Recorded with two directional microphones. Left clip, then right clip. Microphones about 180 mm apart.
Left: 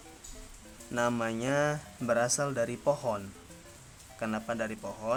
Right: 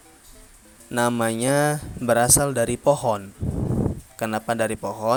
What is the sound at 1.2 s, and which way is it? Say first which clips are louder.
Speech: right 9 dB; 35° right (ahead or behind).